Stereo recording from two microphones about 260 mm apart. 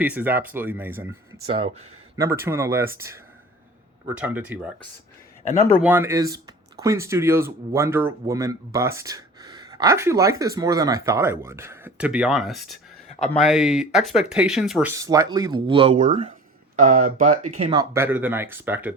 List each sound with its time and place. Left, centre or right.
0.0 s speech: centre
2.1 s speech: centre
5.8 s speech: centre
13.1 s a sound: left
13.4 s speech: centre